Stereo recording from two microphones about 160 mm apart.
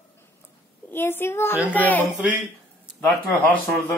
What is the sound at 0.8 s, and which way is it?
A child's voice, 15° left (ahead or behind).